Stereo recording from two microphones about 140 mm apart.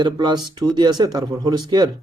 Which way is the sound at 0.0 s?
30° right (ahead or behind).